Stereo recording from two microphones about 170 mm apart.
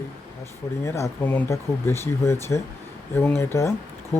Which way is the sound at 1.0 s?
15° left (ahead or behind).